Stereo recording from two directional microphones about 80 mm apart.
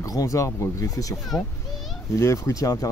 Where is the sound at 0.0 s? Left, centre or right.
Left.